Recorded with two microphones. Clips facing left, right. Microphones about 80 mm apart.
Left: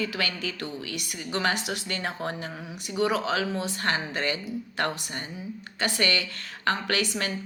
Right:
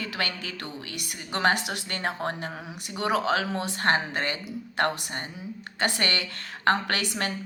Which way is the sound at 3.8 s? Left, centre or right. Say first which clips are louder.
Right 5 dB; right.